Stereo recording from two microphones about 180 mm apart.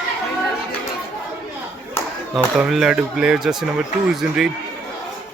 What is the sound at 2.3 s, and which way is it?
Speech, centre (ahead or behind).